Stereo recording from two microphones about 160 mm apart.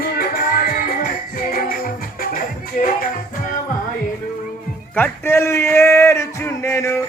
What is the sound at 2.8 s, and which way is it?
Music, 55° left (ahead or behind).